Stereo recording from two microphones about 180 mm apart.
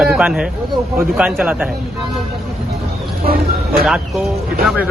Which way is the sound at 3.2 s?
55° right (ahead or behind).